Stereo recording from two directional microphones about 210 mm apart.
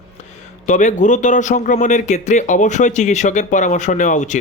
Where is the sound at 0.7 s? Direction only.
35° left (ahead or behind).